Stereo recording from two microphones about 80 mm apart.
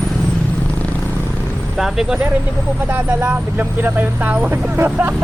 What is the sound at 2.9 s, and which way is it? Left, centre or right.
Speech, right.